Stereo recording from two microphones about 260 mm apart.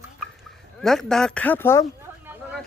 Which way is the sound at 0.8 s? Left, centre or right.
Centre.